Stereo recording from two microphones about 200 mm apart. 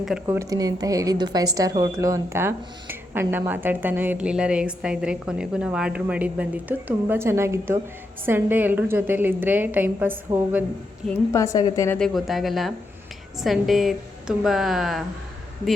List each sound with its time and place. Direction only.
0.0 s a woman's voice: 5° right (ahead or behind)
0.3 s a woman's voice: 20° right (ahead or behind)
11.1 s a woman's voice: 15° left (ahead or behind)
11.9 s a woman's voice: centre (ahead or behind)